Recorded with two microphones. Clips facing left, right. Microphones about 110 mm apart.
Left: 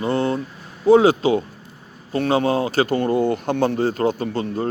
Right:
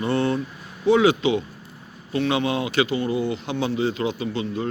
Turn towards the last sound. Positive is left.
turn(degrees=45)  # may be behind; listen again after turning